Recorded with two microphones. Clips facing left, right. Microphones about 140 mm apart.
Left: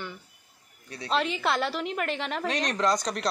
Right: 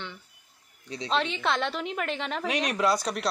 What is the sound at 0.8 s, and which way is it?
Speech, 20° right (ahead or behind).